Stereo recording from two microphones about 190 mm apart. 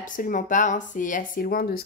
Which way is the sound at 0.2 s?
45° left (ahead or behind).